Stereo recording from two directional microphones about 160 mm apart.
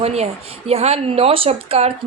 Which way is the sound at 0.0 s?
40° right (ahead or behind).